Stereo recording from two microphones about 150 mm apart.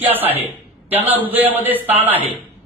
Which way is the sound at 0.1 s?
10° right (ahead or behind).